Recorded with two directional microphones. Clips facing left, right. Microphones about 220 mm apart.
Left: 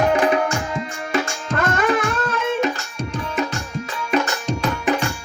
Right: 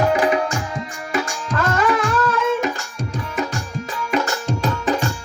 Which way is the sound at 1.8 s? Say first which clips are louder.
Right 1 dB; 20° left (ahead or behind).